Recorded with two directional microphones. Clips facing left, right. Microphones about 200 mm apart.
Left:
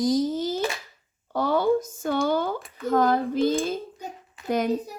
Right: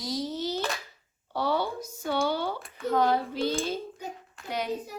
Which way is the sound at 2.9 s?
50° left (ahead or behind).